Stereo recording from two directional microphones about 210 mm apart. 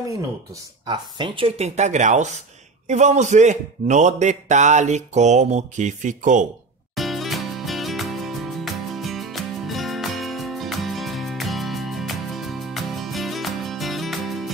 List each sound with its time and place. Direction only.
0.8 s a man's voice: 20° right (ahead or behind)
7.0 s music: centre (ahead or behind)